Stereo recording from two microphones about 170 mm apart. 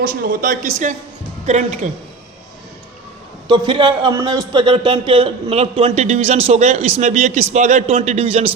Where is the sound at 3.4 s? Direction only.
25° right (ahead or behind).